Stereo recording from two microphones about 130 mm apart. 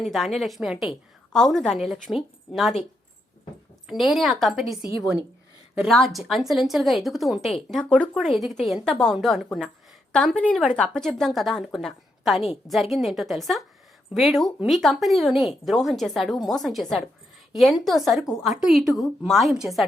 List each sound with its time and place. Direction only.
0.0 s speech: centre (ahead or behind)
3.8 s speech: centre (ahead or behind)
4.8 s a woman's voice: 40° left (ahead or behind)
5.8 s a woman's voice: centre (ahead or behind)